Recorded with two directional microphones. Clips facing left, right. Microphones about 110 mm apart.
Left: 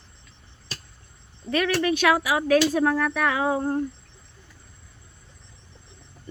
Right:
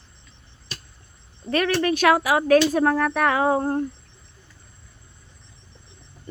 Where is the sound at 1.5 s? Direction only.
45° right (ahead or behind).